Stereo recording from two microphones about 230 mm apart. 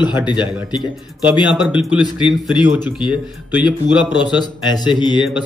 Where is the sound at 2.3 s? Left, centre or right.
Centre.